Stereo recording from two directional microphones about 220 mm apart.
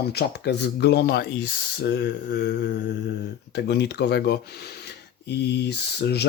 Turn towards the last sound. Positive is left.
turn(degrees=50)  # may be behind; listen again after turning